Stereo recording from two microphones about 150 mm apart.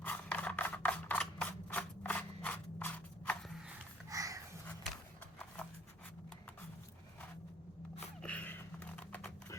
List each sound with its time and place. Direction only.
0.0 s scissors: 10° left (ahead or behind)
4.1 s a sound: 20° right (ahead or behind)
8.2 s computer keyboard: 10° left (ahead or behind)